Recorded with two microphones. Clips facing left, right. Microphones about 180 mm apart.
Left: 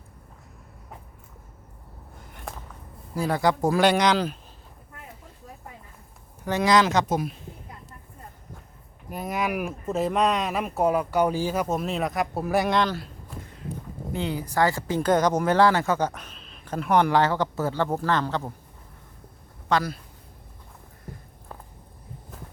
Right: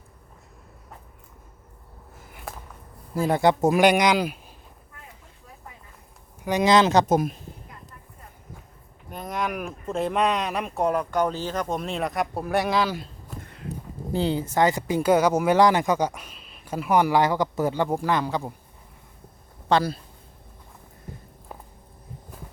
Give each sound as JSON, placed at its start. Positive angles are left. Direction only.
{"t": 2.1, "sound": "a sound", "side_deg": -5}
{"t": 3.2, "sound": "speech", "side_deg": -25}
{"t": 6.4, "sound": "speech", "side_deg": -15}
{"t": 7.1, "sound": "a woman's voice", "side_deg": -45}
{"t": 9.0, "sound": "speech", "side_deg": 5}
{"t": 13.4, "sound": "walk", "side_deg": -65}
{"t": 14.1, "sound": "speech", "side_deg": -30}
{"t": 19.6, "sound": "speech", "side_deg": -30}